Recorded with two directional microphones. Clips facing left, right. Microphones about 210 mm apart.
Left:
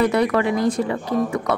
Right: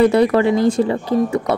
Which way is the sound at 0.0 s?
30° right (ahead or behind).